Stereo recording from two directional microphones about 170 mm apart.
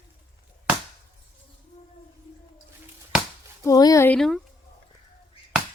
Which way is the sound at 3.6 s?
20° left (ahead or behind).